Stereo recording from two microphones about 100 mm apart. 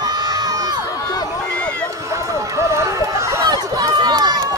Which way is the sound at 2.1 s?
30° right (ahead or behind).